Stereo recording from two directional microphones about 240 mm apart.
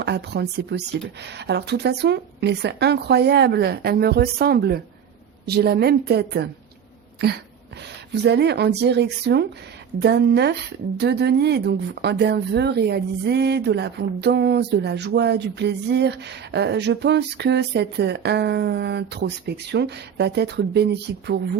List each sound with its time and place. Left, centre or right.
0.0 s speech: right
8.1 s speech: right